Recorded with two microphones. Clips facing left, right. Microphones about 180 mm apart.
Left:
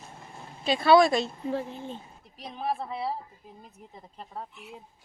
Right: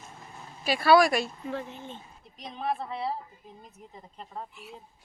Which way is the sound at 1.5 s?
35° left (ahead or behind).